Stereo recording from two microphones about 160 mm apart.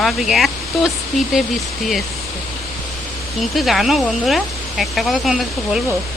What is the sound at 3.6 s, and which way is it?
Speech, centre (ahead or behind).